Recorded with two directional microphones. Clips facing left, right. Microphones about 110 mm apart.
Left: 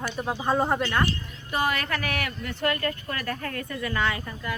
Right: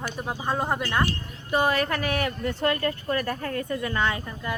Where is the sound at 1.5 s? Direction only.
25° right (ahead or behind).